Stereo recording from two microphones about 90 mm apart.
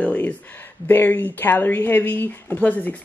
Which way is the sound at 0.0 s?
15° left (ahead or behind).